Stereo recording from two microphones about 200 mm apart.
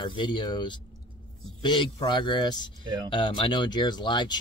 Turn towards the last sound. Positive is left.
turn(degrees=20)  # may be behind; listen again after turning